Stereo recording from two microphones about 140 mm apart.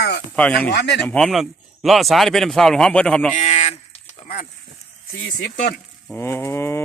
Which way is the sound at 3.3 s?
50° left (ahead or behind).